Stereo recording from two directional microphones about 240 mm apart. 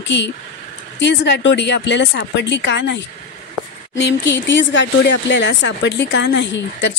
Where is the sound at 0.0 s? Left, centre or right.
Left.